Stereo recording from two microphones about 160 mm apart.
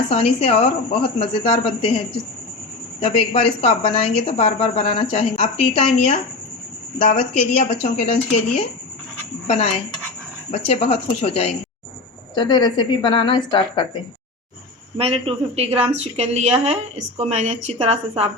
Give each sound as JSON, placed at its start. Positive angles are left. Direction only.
{"t": 0.1, "sound": "speech", "side_deg": 40}
{"t": 3.0, "sound": "speech", "side_deg": 40}
{"t": 9.5, "sound": "speech", "side_deg": 45}
{"t": 12.3, "sound": "a woman's voice", "side_deg": 25}
{"t": 14.9, "sound": "a woman's voice", "side_deg": -35}